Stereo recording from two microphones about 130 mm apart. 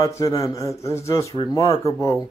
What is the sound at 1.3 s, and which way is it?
Speech, 35° left (ahead or behind).